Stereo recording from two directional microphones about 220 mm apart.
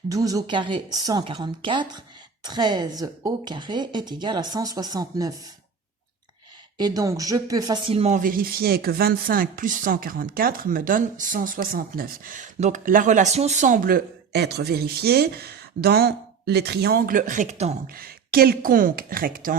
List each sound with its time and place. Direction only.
0.1 s a woman's voice: 15° right (ahead or behind)
6.7 s speech: 15° right (ahead or behind)
17.8 s speech: 40° right (ahead or behind)